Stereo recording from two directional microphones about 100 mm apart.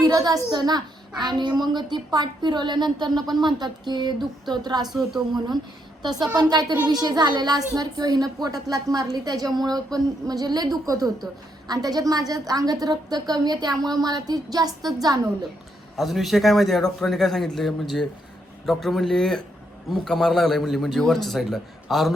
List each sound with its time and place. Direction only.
0.0 s a child's voice: 40° right (ahead or behind)
4.9 s a man's voice: centre (ahead or behind)
6.0 s speech: 40° right (ahead or behind)
16.0 s a man's voice: centre (ahead or behind)